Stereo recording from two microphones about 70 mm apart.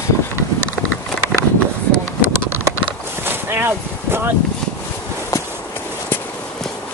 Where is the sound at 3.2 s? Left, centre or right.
Right.